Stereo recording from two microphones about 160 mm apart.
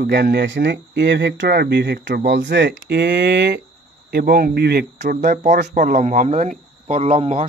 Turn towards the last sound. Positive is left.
turn(degrees=-45)  # may be behind; listen again after turning